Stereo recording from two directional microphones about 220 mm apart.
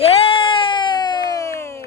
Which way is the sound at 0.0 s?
25° left (ahead or behind).